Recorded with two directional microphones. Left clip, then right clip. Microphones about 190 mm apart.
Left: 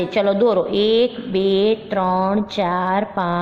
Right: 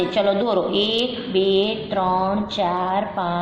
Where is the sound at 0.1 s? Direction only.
55° left (ahead or behind).